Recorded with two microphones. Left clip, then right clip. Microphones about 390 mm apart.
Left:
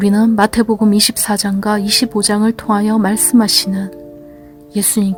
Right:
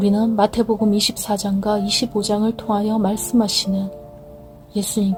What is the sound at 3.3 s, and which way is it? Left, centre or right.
Speech, left.